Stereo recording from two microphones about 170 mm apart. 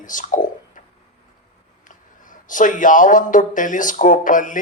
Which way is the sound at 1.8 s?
50° left (ahead or behind).